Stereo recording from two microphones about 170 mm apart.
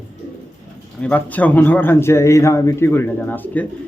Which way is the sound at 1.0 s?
10° left (ahead or behind).